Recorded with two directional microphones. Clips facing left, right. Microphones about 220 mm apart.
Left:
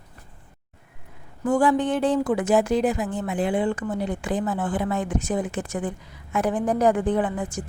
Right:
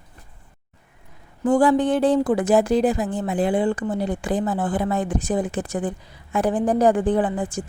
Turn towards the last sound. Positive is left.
turn(degrees=-30)  # may be behind; listen again after turning